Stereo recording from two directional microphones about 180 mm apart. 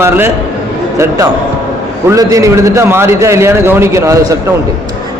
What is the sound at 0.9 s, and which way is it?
A man's voice, 15° right (ahead or behind).